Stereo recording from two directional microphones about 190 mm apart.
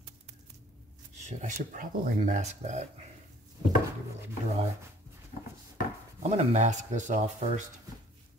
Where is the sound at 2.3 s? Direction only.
40° right (ahead or behind).